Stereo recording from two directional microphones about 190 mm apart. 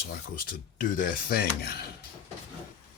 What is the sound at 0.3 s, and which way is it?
Speech, 45° left (ahead or behind).